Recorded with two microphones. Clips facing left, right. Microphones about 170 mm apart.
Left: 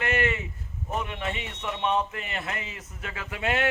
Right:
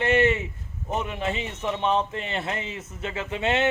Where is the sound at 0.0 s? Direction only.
25° right (ahead or behind).